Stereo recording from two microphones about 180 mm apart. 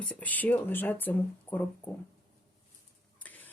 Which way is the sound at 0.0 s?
10° left (ahead or behind).